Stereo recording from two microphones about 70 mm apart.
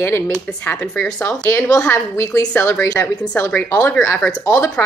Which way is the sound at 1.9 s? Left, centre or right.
Left.